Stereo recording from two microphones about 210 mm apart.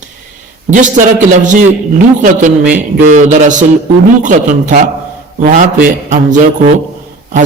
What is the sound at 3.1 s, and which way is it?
A man's voice, 35° right (ahead or behind).